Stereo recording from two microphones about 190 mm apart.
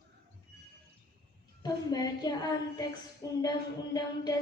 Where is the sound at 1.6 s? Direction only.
20° left (ahead or behind).